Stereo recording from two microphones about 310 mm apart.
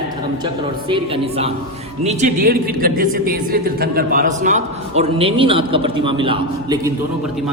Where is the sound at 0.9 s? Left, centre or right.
Centre.